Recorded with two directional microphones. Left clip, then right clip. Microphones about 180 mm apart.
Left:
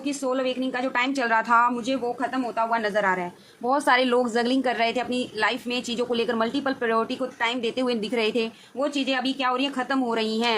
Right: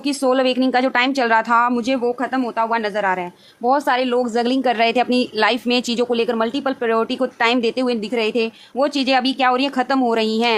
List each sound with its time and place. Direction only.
0.0 s speech: 45° right (ahead or behind); by 1.7 s 25° right (ahead or behind)
1.7 s speech: 45° right (ahead or behind); by 4.4 s 15° right (ahead or behind)
4.4 s speech: 25° right (ahead or behind)
7.2 s speech: 40° right (ahead or behind)
7.8 s speech: 25° right (ahead or behind)
8.8 s speech: 40° right (ahead or behind); by 10.6 s 25° right (ahead or behind)